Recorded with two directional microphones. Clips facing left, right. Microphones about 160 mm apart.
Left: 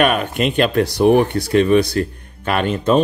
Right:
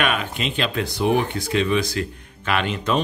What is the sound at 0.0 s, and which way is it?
Speech, 50° left (ahead or behind).